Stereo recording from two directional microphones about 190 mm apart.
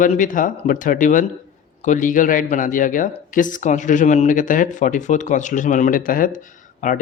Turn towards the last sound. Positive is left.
turn(degrees=45)  # may be behind; listen again after turning